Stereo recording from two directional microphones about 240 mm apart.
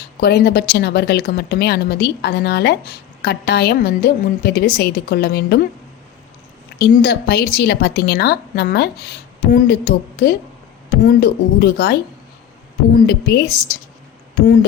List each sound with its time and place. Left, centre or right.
0.2 s a woman's voice: left
6.7 s a woman's voice: left